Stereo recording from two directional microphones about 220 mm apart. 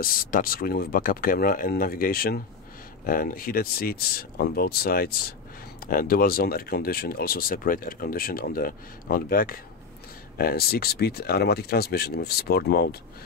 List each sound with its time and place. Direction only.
0.0 s speech: 40° left (ahead or behind)